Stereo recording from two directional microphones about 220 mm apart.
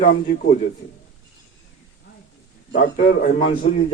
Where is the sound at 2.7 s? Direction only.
35° left (ahead or behind).